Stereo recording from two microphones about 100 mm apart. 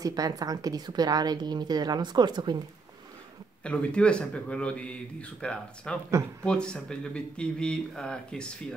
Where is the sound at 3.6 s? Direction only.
10° left (ahead or behind).